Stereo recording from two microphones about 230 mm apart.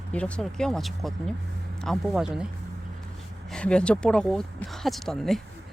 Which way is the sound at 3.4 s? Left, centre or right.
Centre.